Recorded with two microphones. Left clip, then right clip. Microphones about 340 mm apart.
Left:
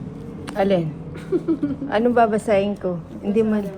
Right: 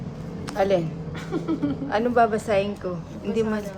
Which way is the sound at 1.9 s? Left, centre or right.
Left.